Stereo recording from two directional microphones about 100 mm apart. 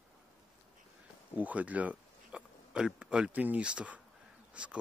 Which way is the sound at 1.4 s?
15° right (ahead or behind).